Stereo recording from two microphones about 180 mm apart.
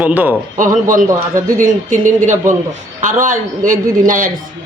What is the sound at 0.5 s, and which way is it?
A man's voice, 45° right (ahead or behind).